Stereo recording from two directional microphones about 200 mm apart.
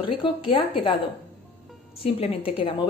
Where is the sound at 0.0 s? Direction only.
25° left (ahead or behind).